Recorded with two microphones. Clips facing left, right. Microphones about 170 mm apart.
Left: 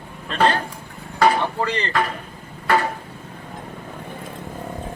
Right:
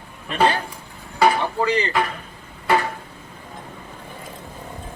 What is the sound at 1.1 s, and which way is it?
Wood, 5° right (ahead or behind).